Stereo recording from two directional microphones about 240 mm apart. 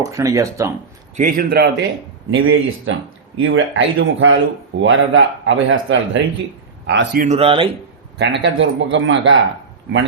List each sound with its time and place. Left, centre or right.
0.0 s speech: centre
1.1 s a man's voice: right
2.3 s speech: right
7.3 s speech: right
8.2 s speech: right